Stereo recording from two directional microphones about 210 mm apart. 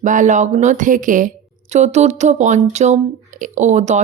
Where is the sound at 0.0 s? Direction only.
35° right (ahead or behind).